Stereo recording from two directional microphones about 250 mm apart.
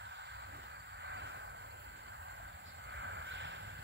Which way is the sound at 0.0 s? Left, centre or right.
Right.